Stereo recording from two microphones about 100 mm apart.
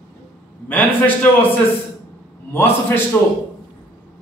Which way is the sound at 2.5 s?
20° left (ahead or behind).